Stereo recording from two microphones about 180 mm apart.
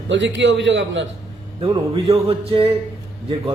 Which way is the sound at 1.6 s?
30° right (ahead or behind).